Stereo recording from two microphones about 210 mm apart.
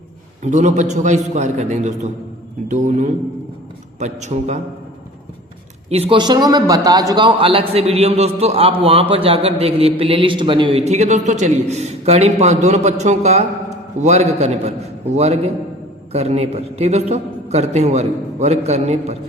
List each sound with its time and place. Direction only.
0.4 s a man's voice: 35° right (ahead or behind)
5.9 s a man's voice: 25° right (ahead or behind)